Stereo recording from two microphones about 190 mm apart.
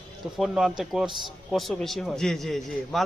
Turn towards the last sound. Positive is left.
turn(degrees=0)  # may be behind; listen again after turning